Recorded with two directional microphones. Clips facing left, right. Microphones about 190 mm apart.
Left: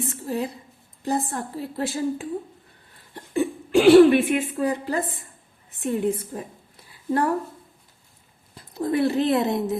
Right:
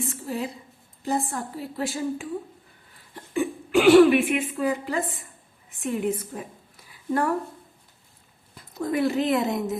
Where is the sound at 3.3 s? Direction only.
35° left (ahead or behind).